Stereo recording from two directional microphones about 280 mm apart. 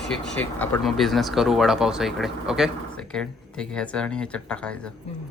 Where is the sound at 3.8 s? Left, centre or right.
Centre.